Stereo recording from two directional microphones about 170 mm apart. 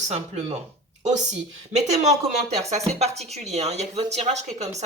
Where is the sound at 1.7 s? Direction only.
40° right (ahead or behind).